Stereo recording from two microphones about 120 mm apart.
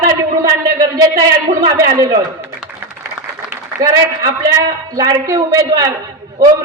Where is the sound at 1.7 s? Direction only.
25° right (ahead or behind).